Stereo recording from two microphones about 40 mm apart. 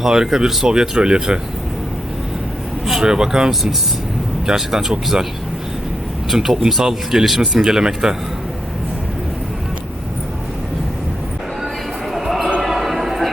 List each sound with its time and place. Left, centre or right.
0.0 s speech: centre
3.0 s speech: centre
6.3 s speech: centre
12.1 s basketball bounce: centre
12.6 s a sound: centre